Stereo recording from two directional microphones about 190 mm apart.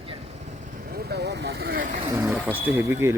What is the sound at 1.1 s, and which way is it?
Vehicle, 60° right (ahead or behind).